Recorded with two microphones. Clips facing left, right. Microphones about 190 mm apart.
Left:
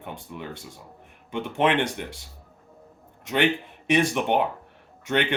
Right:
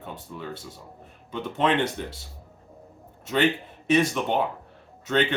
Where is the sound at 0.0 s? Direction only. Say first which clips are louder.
Even; 15° left (ahead or behind).